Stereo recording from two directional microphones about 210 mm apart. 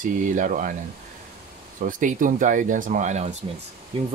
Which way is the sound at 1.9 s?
40° right (ahead or behind).